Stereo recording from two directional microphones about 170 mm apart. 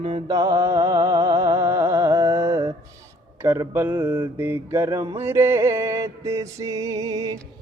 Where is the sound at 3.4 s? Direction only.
15° right (ahead or behind).